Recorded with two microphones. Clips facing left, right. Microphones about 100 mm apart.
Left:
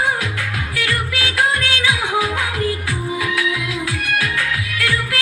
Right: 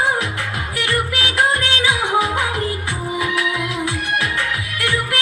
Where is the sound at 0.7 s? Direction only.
25° right (ahead or behind).